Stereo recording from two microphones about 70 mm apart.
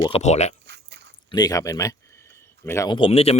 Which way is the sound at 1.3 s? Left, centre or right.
Left.